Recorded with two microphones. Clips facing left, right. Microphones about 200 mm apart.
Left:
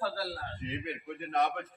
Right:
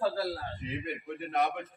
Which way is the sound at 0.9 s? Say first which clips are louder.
Right 1 dB; centre (ahead or behind).